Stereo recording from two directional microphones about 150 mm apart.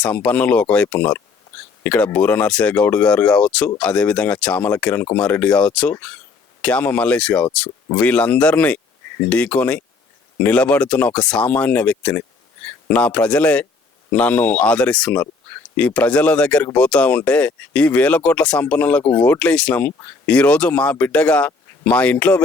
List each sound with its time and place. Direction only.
0.0 s speech: 10° left (ahead or behind)